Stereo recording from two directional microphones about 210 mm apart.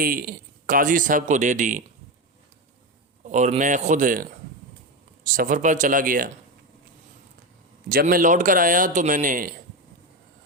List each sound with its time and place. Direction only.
0.0 s a man's voice: 45° right (ahead or behind)
3.2 s a man's voice: 35° right (ahead or behind)
7.9 s a man's voice: 45° right (ahead or behind)